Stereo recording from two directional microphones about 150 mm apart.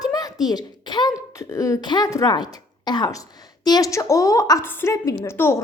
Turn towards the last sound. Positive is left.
turn(degrees=15)  # may be behind; listen again after turning